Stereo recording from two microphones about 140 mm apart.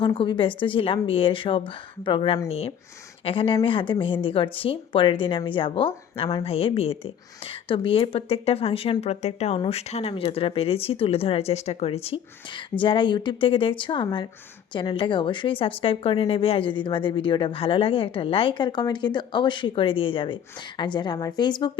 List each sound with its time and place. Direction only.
0.0 s speech: 35° left (ahead or behind)